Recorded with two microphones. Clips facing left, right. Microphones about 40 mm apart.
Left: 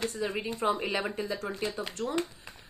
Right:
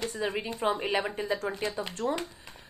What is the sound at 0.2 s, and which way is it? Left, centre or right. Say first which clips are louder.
Speech: right 3 dB; right.